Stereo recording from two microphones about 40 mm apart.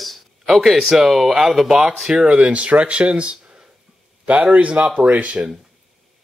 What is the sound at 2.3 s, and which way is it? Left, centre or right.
Speech, right.